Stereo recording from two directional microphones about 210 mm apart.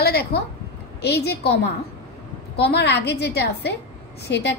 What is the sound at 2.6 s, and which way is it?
A woman's voice, 50° left (ahead or behind).